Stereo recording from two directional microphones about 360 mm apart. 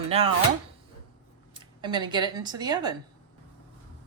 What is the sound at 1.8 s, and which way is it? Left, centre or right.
A woman's voice, centre.